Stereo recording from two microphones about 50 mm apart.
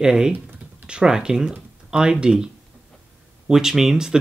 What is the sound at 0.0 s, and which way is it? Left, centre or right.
Speech, centre.